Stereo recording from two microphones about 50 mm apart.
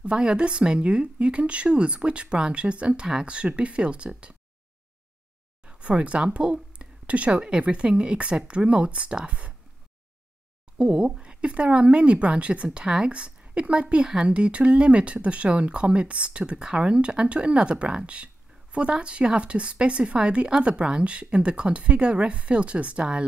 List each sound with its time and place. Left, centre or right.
0.0 s a woman's voice: centre
5.7 s a woman's voice: right
10.8 s a woman's voice: centre